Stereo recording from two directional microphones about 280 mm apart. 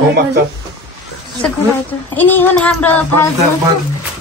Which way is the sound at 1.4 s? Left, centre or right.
Centre.